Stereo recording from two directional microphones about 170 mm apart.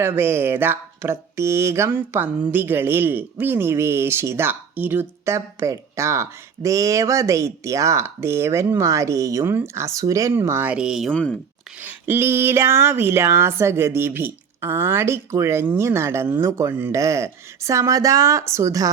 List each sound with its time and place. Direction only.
0.0 s speech: 15° right (ahead or behind); by 11.3 s 5° left (ahead or behind)
11.8 s speech: 10° right (ahead or behind)